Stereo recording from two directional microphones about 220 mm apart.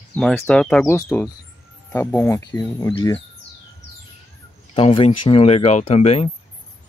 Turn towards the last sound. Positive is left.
turn(degrees=30)  # may be behind; listen again after turning